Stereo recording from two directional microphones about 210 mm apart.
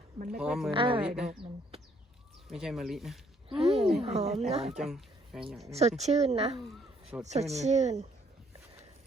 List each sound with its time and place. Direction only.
0.3 s speech: 5° right (ahead or behind)
0.7 s speech: 25° right (ahead or behind)
1.0 s speech: 5° right (ahead or behind)
2.5 s speech: centre (ahead or behind)
3.5 s speech: 30° right (ahead or behind)
4.7 s speech: centre (ahead or behind)
6.0 s speech: 30° right (ahead or behind)
6.6 s a sound: centre (ahead or behind)
7.3 s speech: 30° right (ahead or behind)